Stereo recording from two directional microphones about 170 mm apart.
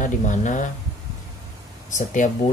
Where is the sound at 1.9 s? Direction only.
45° left (ahead or behind).